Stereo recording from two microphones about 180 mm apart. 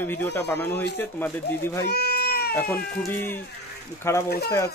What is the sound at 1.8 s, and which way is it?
Baby cry, 60° left (ahead or behind).